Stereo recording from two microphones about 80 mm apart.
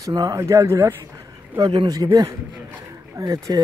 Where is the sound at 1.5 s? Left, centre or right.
Right.